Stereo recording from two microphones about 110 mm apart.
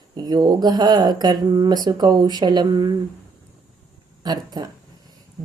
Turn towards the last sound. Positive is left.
turn(degrees=-35)  # may be behind; listen again after turning